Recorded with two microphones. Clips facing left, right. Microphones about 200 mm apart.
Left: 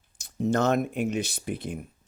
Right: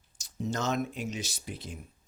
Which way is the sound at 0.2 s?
60° left (ahead or behind).